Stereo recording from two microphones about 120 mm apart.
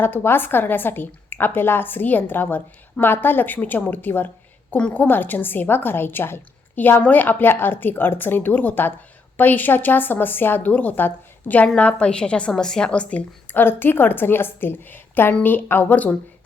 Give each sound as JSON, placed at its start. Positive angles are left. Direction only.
{"t": 0.0, "sound": "a woman's voice", "side_deg": 20}